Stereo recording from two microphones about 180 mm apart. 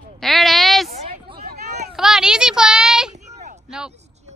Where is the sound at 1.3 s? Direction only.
35° right (ahead or behind).